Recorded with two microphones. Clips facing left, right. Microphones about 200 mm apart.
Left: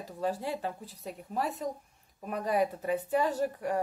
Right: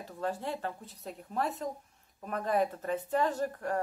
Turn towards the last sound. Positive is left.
turn(degrees=10)  # may be behind; listen again after turning